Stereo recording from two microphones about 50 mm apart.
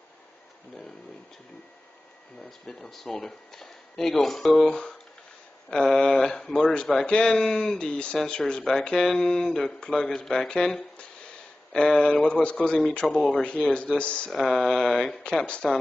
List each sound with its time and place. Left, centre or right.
2.8 s speech: centre; by 14.3 s left
14.3 s speech: centre
15.1 s speech: left